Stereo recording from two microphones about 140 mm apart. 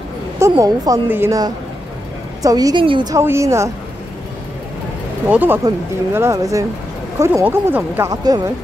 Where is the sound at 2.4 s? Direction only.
25° right (ahead or behind).